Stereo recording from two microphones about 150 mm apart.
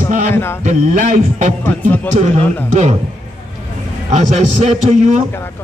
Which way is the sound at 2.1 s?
50° right (ahead or behind).